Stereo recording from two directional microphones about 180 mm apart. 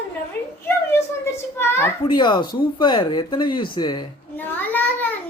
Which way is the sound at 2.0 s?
25° left (ahead or behind).